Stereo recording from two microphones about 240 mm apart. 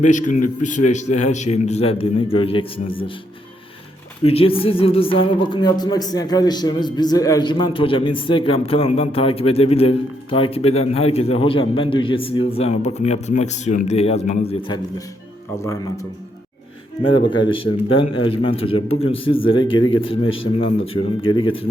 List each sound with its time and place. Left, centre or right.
0.0 s a man's voice: left
4.2 s speech: left
15.6 s a man's voice: centre